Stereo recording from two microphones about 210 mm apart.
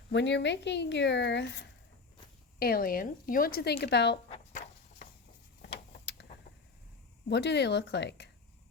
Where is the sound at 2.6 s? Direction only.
45° left (ahead or behind).